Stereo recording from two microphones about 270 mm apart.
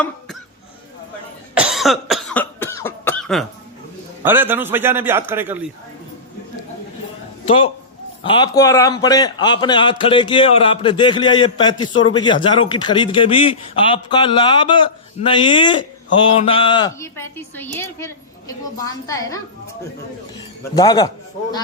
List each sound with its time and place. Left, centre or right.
1.5 s cough: centre
4.2 s a man's voice: centre
7.4 s a man's voice: left
20.7 s a man's voice: centre